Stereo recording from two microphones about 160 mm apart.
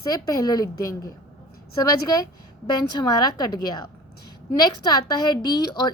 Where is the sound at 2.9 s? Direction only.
25° left (ahead or behind).